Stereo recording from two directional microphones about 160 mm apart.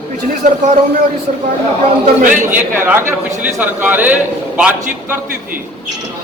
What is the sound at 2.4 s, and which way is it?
A man's voice, 15° right (ahead or behind).